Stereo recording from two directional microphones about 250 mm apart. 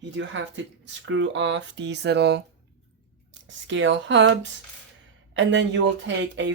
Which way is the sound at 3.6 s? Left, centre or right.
Right.